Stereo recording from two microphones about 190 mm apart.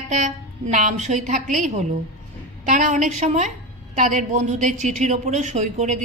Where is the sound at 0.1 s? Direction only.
40° right (ahead or behind).